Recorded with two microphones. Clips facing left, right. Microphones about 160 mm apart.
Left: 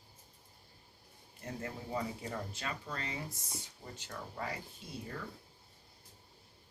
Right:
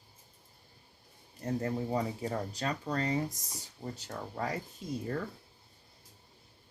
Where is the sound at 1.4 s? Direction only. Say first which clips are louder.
Right 10 dB; 40° right (ahead or behind).